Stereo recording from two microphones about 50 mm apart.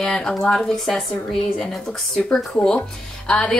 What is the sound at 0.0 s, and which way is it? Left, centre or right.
A woman's voice, centre.